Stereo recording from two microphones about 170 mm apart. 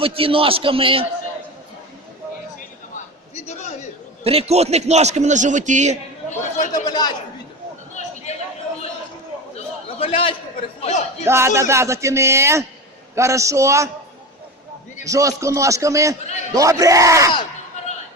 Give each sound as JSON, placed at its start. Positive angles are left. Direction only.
{"t": 0.0, "sound": "a man's voice", "side_deg": -35}
{"t": 2.6, "sound": "a sound", "side_deg": 45}
{"t": 4.2, "sound": "a man's voice", "side_deg": -35}
{"t": 6.3, "sound": "speech", "side_deg": 50}
{"t": 6.8, "sound": "a man's voice", "side_deg": 25}
{"t": 9.6, "sound": "a sound", "side_deg": 35}
{"t": 10.8, "sound": "a man's voice", "side_deg": 40}
{"t": 11.3, "sound": "speech", "side_deg": -15}
{"t": 15.0, "sound": "a man's voice", "side_deg": -20}